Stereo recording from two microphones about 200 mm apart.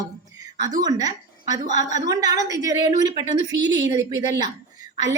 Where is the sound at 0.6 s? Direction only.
20° right (ahead or behind).